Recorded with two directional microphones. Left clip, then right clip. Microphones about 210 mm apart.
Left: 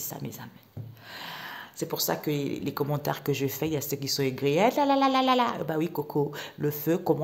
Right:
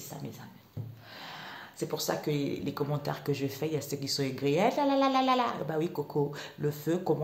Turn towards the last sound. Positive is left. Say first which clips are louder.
# left 4 dB
turn(degrees=30)  # may be behind; listen again after turning